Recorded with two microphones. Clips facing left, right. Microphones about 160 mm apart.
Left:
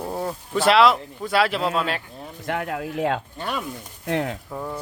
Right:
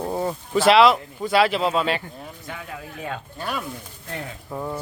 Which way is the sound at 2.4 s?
75° left (ahead or behind).